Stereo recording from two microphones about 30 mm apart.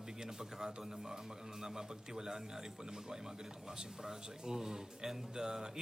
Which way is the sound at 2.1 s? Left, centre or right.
Centre.